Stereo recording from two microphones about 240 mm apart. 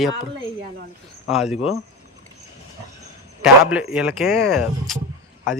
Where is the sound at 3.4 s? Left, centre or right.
Centre.